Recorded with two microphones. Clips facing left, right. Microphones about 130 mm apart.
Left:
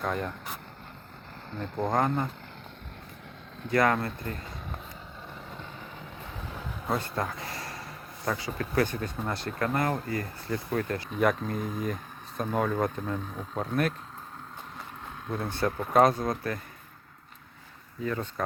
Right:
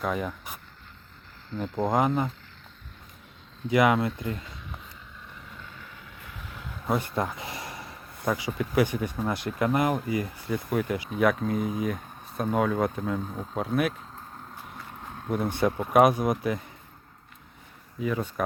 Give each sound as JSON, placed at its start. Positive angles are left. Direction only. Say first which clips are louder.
{"t": 0.0, "sound": "speech", "louder": "right 2 dB", "side_deg": -5}
{"t": 1.7, "sound": "speech", "louder": "right 2 dB", "side_deg": -15}
{"t": 3.7, "sound": "speech", "louder": "right 3 dB", "side_deg": -15}
{"t": 6.8, "sound": "a sound", "louder": "right 3 dB", "side_deg": -10}
{"t": 8.3, "sound": "speech", "louder": "right 3 dB", "side_deg": -15}
{"t": 11.2, "sound": "speech", "louder": "right 2 dB", "side_deg": 0}
{"t": 15.3, "sound": "speech", "louder": "right 4 dB", "side_deg": -15}
{"t": 18.0, "sound": "speech", "louder": "right 3 dB", "side_deg": -10}